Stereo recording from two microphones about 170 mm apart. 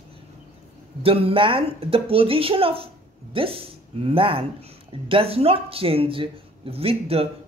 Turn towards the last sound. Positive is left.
turn(degrees=-35)  # may be behind; listen again after turning